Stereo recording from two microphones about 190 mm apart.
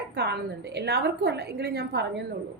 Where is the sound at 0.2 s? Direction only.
65° right (ahead or behind).